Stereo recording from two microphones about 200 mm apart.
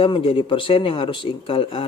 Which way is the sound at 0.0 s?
25° left (ahead or behind).